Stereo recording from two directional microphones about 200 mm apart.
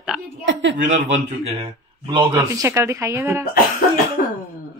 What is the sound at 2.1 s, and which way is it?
Speech, 15° right (ahead or behind).